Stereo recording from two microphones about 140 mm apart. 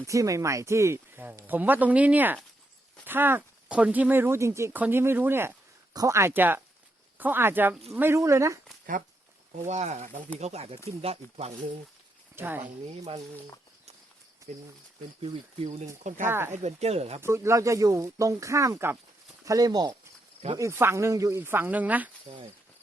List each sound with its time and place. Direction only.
0.0 s speech: 20° right (ahead or behind)
8.9 s speech: 70° right (ahead or behind)
9.6 s speech: 55° right (ahead or behind)
10.3 s speech: 50° right (ahead or behind)
12.4 s speech: 15° right (ahead or behind)
15.2 s speech: 50° right (ahead or behind)
16.2 s speech: 15° right (ahead or behind)
16.6 s speech: 50° right (ahead or behind)
17.2 s speech: 20° right (ahead or behind)